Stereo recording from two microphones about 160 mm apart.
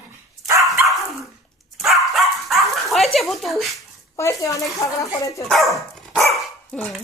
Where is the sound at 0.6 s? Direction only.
Centre (ahead or behind).